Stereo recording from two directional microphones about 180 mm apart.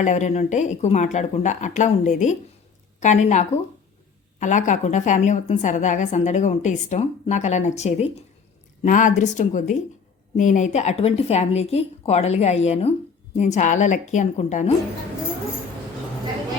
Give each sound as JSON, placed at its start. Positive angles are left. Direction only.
{"t": 0.0, "sound": "a woman's voice", "side_deg": 40}